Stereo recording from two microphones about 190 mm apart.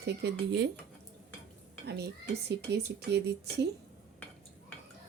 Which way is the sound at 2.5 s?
60° right (ahead or behind).